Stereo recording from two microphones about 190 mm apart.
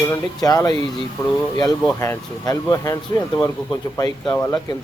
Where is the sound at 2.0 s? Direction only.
15° left (ahead or behind).